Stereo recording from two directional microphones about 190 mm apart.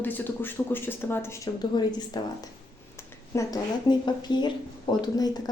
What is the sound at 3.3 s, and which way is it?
Speech, 15° left (ahead or behind).